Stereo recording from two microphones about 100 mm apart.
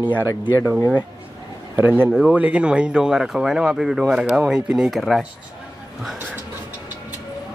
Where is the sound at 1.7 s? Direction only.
20° right (ahead or behind); by 5.3 s centre (ahead or behind).